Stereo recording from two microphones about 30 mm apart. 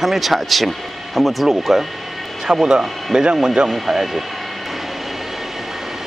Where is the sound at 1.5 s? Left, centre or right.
Centre.